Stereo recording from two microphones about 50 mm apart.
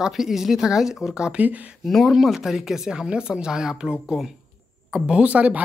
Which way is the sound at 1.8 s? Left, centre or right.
Centre.